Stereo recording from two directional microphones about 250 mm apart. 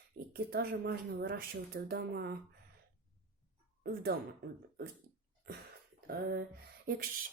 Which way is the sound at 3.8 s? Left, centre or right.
Right.